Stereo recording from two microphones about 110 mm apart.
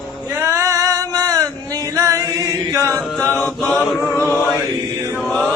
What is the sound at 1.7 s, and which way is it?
Chant, 30° right (ahead or behind).